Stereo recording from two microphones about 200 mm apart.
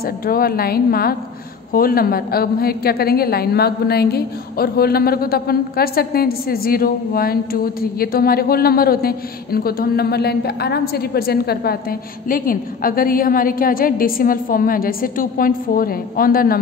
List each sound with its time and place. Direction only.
0.0 s a woman's voice: 45° left (ahead or behind)